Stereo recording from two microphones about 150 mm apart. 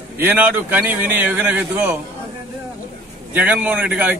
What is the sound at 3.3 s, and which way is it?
Speech, 10° right (ahead or behind).